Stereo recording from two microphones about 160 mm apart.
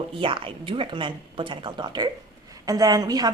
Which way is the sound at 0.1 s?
35° right (ahead or behind).